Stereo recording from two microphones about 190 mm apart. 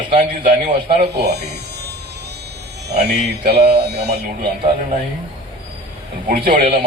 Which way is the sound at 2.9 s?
60° right (ahead or behind).